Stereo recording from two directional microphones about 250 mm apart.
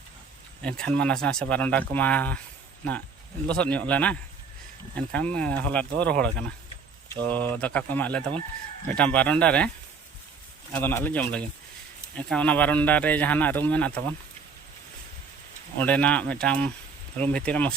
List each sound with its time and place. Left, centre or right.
0.6 s speech: centre
3.5 s speech: centre
10.7 s speech: centre
15.8 s speech: centre